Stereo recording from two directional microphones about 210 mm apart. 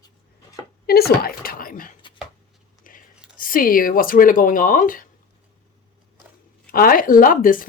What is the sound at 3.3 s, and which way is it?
Speech, 40° left (ahead or behind).